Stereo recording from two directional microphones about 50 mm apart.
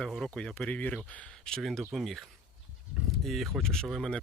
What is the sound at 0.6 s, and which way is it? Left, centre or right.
Speech, left.